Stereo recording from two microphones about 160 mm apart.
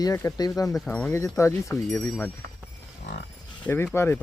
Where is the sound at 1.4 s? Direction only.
20° left (ahead or behind).